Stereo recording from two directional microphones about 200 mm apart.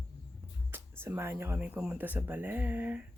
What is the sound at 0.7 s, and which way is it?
Speech, 10° right (ahead or behind).